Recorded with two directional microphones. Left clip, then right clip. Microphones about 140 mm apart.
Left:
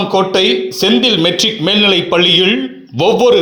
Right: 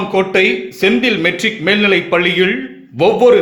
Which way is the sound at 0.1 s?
25° left (ahead or behind).